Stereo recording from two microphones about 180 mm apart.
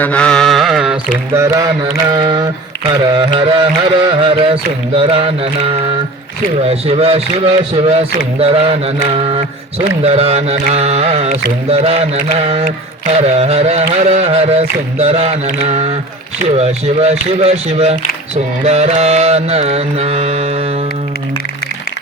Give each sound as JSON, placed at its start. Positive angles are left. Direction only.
{"t": 0.0, "sound": "mantra", "side_deg": 5}
{"t": 2.0, "sound": "music", "side_deg": -25}
{"t": 4.3, "sound": "carnatic music", "side_deg": -30}